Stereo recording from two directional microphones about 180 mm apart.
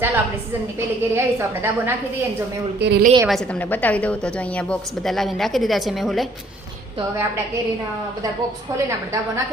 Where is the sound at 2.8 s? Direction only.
70° right (ahead or behind).